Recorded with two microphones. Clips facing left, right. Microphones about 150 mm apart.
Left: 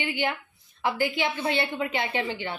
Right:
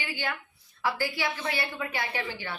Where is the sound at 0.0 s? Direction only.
20° left (ahead or behind).